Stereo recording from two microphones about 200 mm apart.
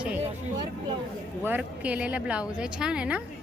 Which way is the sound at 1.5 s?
10° right (ahead or behind).